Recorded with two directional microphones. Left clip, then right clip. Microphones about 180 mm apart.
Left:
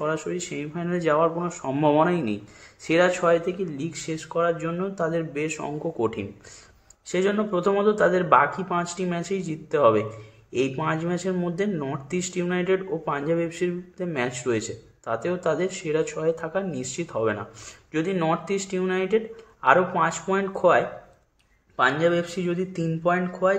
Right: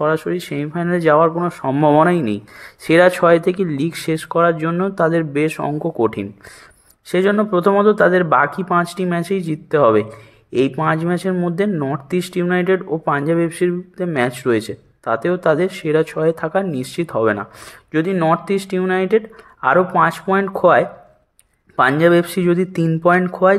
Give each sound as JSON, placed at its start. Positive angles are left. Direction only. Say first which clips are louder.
{"t": 0.0, "sound": "speech", "louder": "right 9 dB", "side_deg": -40}